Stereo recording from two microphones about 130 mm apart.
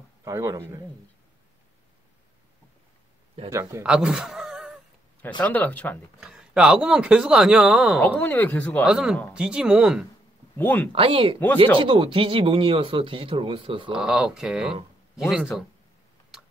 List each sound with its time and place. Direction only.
0.2 s a man's voice: 25° right (ahead or behind)
3.4 s a man's voice: 20° right (ahead or behind)
3.8 s a sound: 5° right (ahead or behind)
5.4 s speech: 10° left (ahead or behind)
6.2 s speech: 5° right (ahead or behind)
8.2 s speech: 15° left (ahead or behind)
8.8 s speech: 5° right (ahead or behind)
10.6 s speech: 15° left (ahead or behind)
10.9 s speech: 45° right (ahead or behind)
11.3 s speech: 15° left (ahead or behind)
11.6 s speech: 40° right (ahead or behind)
13.9 s speech: 5° right (ahead or behind)